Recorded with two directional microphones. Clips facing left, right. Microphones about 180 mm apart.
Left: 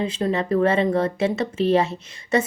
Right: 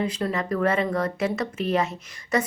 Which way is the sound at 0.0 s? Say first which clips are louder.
Left 3 dB; 25° left (ahead or behind).